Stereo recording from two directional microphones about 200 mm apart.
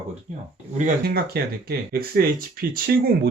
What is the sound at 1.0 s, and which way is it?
Speech, 50° right (ahead or behind).